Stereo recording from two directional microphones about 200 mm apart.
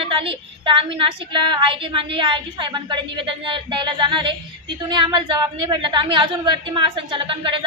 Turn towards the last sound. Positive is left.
turn(degrees=-25)  # may be behind; listen again after turning